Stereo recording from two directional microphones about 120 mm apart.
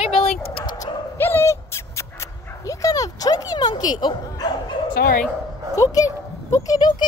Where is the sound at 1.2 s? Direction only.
20° left (ahead or behind); by 5.0 s 35° left (ahead or behind).